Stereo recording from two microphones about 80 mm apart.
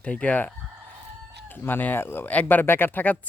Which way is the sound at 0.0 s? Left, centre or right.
Centre.